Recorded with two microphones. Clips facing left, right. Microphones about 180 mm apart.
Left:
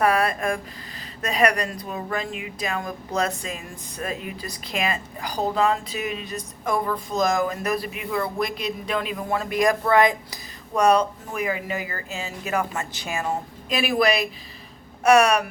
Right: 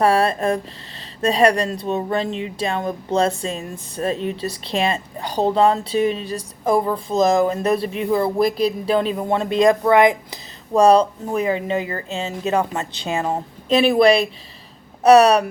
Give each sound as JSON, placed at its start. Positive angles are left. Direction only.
{"t": 0.0, "sound": "speech", "side_deg": -30}
{"t": 10.8, "sound": "speech", "side_deg": -30}